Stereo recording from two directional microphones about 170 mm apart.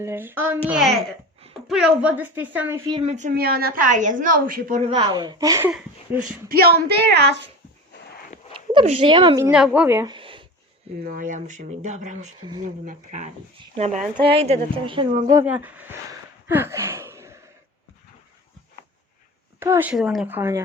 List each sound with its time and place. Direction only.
0.0 s a woman's voice: 15° right (ahead or behind)
1.6 s a woman's voice: 5° right (ahead or behind); by 3.0 s 20° right (ahead or behind)
3.0 s speech: 40° right (ahead or behind)
3.3 s a woman's voice: 65° right (ahead or behind)
4.8 s speech: 30° right (ahead or behind)
6.1 s speech: 55° right (ahead or behind); by 7.4 s 85° right
8.7 s speech: 35° right (ahead or behind)
9.4 s a woman's voice: 5° right (ahead or behind)
10.0 s a sound: 30° right (ahead or behind)
11.0 s speech: 55° right (ahead or behind); by 15.1 s 30° right (ahead or behind)
15.4 s a woman's voice: 10° right (ahead or behind)
16.5 s a sound: 15° right (ahead or behind)
19.5 s speech: 15° right (ahead or behind)
19.9 s a woman's voice: 5° right (ahead or behind)